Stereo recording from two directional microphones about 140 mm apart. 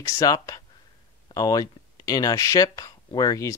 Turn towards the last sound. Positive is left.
turn(degrees=25)  # may be behind; listen again after turning